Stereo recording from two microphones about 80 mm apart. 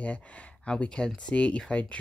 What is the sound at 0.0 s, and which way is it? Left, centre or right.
Speech, centre.